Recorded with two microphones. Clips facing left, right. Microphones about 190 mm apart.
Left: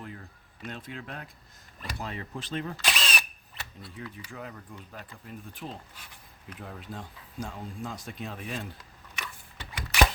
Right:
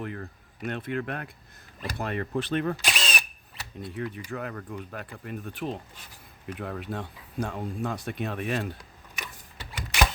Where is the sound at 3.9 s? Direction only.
65° right (ahead or behind).